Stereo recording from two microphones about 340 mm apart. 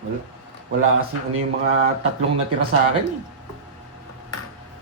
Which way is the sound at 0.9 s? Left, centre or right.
Right.